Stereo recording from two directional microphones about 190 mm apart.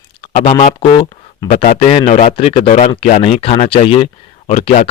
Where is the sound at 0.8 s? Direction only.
25° left (ahead or behind).